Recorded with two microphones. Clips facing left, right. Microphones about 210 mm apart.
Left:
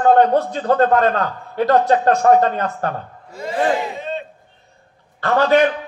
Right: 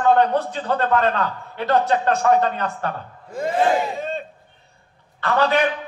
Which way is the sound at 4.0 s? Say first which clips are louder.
Left 1 dB; 45° right (ahead or behind).